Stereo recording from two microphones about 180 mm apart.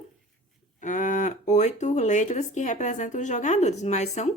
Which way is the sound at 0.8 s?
45° left (ahead or behind).